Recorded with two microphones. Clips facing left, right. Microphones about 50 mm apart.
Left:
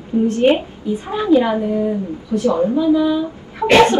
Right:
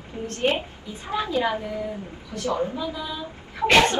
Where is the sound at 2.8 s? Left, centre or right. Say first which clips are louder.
Left 16 dB; centre.